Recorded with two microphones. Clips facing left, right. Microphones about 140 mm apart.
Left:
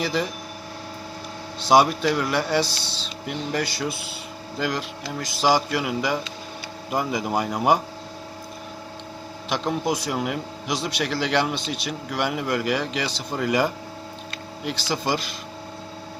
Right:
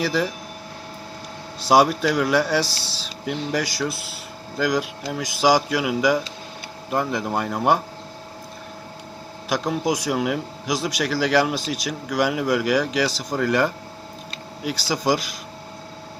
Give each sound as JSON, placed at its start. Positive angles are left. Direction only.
{"t": 0.0, "sound": "speech", "side_deg": 0}
{"t": 1.6, "sound": "a man's voice", "side_deg": -5}
{"t": 9.5, "sound": "a man's voice", "side_deg": -10}